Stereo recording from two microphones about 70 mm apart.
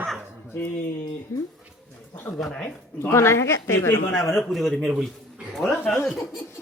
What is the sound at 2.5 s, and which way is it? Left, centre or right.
Speech, centre.